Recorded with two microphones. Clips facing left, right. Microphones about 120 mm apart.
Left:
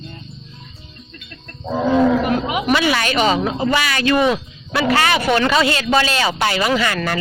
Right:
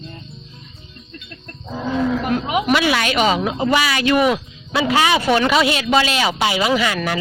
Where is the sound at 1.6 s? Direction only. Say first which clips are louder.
Left 6 dB; 65° left (ahead or behind).